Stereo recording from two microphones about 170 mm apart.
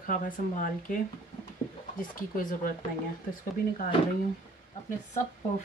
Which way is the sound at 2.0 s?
55° left (ahead or behind).